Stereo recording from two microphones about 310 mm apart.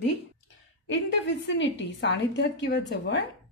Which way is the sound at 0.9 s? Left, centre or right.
Left.